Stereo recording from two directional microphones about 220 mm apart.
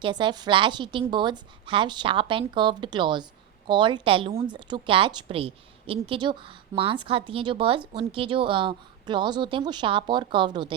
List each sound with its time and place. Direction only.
0.0 s a woman's voice: 20° right (ahead or behind)